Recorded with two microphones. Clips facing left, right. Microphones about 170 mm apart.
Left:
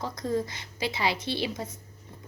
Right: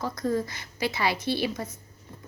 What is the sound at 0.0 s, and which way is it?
Speech, 20° left (ahead or behind).